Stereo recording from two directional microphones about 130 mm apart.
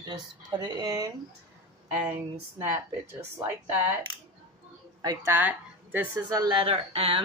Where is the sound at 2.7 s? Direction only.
20° right (ahead or behind).